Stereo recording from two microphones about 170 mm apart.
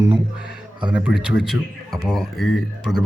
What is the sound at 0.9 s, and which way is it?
Speech, 5° right (ahead or behind).